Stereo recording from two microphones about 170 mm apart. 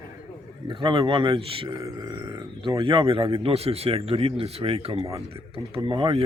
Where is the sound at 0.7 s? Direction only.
30° right (ahead or behind).